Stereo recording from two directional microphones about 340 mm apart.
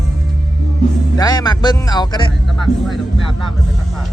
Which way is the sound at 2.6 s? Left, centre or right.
Centre.